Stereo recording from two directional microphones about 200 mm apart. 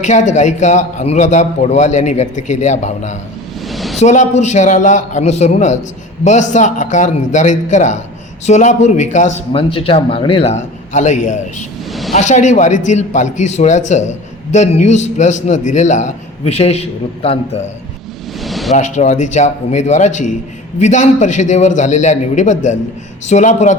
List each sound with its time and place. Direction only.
0.0 s speech: 35° left (ahead or behind)
3.7 s a sound: centre (ahead or behind)
4.0 s speech: 35° left (ahead or behind)
18.3 s vehicle: centre (ahead or behind)
18.7 s speech: 35° left (ahead or behind)